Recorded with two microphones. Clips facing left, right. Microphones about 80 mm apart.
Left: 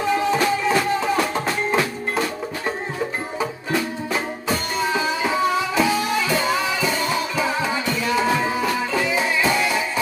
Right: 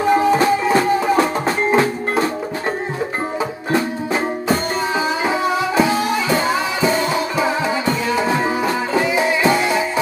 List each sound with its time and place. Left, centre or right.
0.0 s music: right
3.7 s music: right